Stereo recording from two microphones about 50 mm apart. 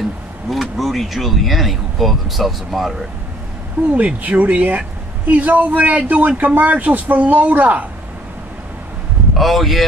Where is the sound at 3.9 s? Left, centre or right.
Right.